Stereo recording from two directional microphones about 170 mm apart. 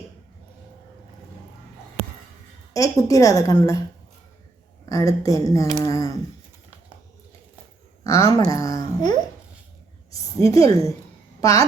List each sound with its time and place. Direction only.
2.7 s a woman's voice: 20° left (ahead or behind)
4.9 s a woman's voice: 20° left (ahead or behind)
8.0 s a woman's voice: 20° left (ahead or behind)